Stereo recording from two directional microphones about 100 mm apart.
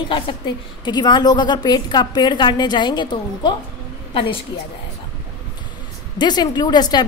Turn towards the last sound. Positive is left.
turn(degrees=45)  # may be behind; listen again after turning